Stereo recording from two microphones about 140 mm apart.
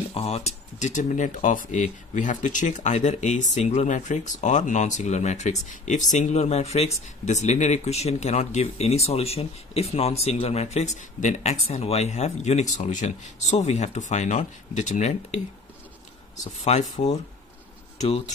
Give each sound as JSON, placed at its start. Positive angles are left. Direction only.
{"t": 0.1, "sound": "speech", "side_deg": 45}
{"t": 16.7, "sound": "speech", "side_deg": 50}